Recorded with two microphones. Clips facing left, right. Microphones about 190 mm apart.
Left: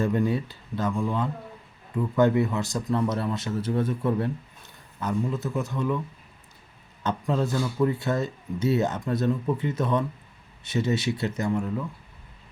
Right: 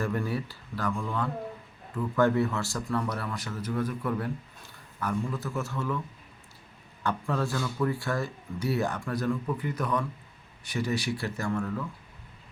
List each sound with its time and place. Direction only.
0.0 s speech: 20° left (ahead or behind)
7.0 s speech: 20° left (ahead or behind)